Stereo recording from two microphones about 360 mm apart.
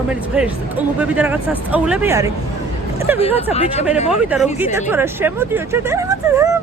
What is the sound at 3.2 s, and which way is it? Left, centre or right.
Speech, centre.